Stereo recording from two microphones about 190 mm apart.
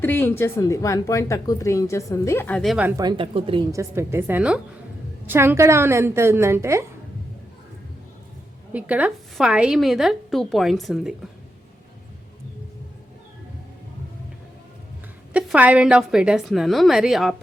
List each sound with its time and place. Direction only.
0.0 s a woman's voice: 10° left (ahead or behind)
3.0 s a woman's voice: 25° right (ahead or behind)
3.7 s a woman's voice: 15° right (ahead or behind)
8.7 s a woman's voice: 5° right (ahead or behind)
15.3 s a woman's voice: 5° right (ahead or behind)